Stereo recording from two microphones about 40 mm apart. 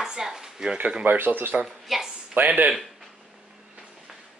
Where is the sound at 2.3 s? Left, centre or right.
Right.